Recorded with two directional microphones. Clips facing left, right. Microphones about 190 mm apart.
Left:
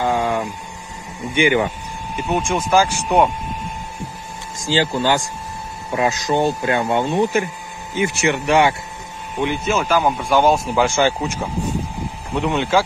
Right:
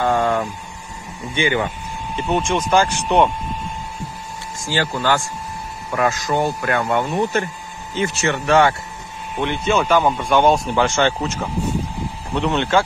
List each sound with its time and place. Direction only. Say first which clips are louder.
0.0 s a sound: right 1 dB; 10° left (ahead or behind)
1.3 s speech: left 3 dB; 15° left (ahead or behind)
4.6 s speech: left 2 dB; 15° left (ahead or behind)